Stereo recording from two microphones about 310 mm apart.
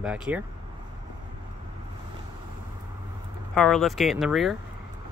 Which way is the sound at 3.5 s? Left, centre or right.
Centre.